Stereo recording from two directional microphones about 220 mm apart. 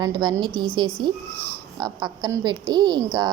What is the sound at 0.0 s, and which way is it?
A woman's voice, 20° right (ahead or behind).